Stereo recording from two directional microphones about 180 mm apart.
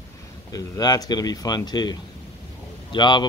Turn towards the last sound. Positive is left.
turn(degrees=25)  # may be behind; listen again after turning